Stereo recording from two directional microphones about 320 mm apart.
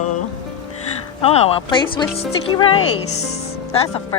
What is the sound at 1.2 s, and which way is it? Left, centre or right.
Speech, centre.